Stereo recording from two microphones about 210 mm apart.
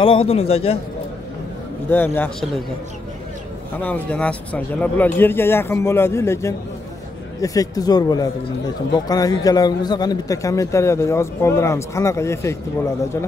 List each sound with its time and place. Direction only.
0.0 s a man's voice: 25° left (ahead or behind)
1.9 s a man's voice: 10° left (ahead or behind)
3.7 s a man's voice: 10° left (ahead or behind)